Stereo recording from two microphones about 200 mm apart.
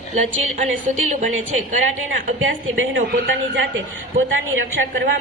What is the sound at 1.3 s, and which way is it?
Speech, 90° right.